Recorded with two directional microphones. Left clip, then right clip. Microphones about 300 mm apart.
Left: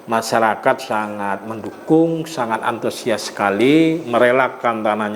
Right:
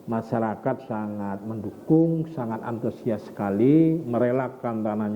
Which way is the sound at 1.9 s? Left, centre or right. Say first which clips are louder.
Left 6 dB; left.